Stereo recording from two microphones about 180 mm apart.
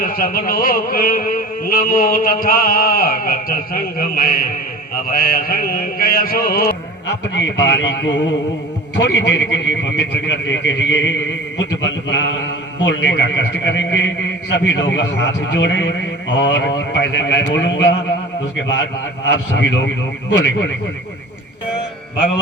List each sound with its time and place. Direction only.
0.0 s music: 55° left (ahead or behind)
5.1 s mantra: 55° left (ahead or behind)
7.3 s a man's voice: 75° left (ahead or behind)
19.3 s a man's voice: 75° left (ahead or behind)